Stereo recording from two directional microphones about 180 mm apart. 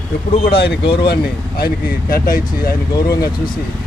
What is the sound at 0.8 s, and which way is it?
Speech, 30° left (ahead or behind).